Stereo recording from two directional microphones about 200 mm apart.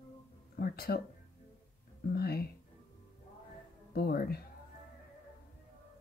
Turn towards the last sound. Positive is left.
turn(degrees=50)  # may be behind; listen again after turning